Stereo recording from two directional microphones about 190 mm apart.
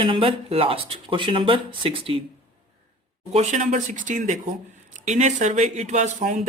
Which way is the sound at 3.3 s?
40° right (ahead or behind).